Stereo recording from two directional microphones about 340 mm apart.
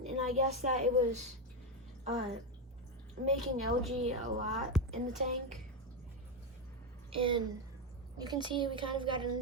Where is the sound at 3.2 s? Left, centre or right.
Right.